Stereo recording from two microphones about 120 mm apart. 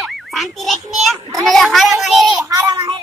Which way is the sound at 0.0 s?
Centre (ahead or behind).